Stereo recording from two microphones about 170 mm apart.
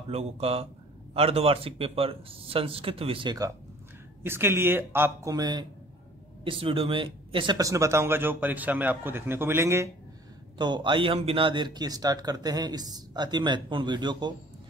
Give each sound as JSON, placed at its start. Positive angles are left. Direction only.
{"t": 0.1, "sound": "speech", "side_deg": -40}
{"t": 10.6, "sound": "speech", "side_deg": -25}